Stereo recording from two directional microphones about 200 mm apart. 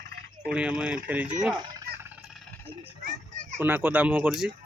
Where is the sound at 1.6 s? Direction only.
20° right (ahead or behind).